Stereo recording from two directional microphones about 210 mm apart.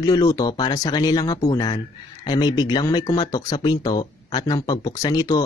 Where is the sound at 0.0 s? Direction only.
20° left (ahead or behind).